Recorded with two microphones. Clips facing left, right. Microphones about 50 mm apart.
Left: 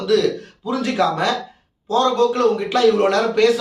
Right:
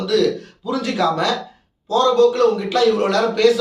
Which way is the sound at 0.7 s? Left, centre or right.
Left.